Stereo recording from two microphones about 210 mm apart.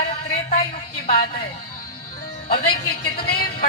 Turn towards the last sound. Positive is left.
turn(degrees=45)  # may be behind; listen again after turning